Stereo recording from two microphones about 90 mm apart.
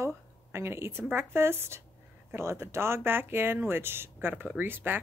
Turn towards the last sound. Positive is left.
turn(degrees=-20)  # may be behind; listen again after turning